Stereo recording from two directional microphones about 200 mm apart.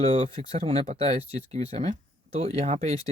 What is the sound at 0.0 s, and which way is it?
Speech, 30° right (ahead or behind).